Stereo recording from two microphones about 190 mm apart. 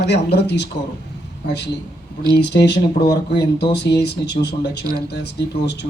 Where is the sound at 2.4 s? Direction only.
60° left (ahead or behind).